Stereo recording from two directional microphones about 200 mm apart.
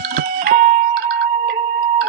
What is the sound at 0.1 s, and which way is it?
Music, 45° right (ahead or behind).